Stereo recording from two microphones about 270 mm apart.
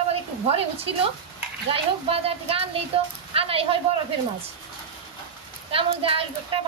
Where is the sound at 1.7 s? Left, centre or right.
Right.